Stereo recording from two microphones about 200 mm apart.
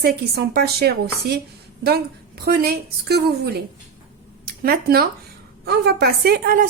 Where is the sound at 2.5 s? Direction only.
50° right (ahead or behind).